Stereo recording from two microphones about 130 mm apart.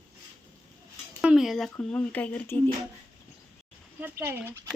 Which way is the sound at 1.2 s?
5° right (ahead or behind).